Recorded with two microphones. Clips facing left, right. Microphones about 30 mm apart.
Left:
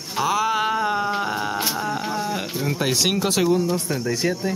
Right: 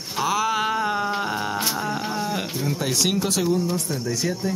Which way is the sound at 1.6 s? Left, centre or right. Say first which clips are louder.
Left 1 dB; centre.